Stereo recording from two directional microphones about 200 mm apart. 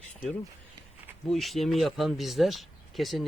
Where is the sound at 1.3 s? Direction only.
Centre (ahead or behind).